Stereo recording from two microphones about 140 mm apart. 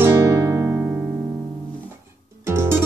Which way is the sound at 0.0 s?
15° right (ahead or behind).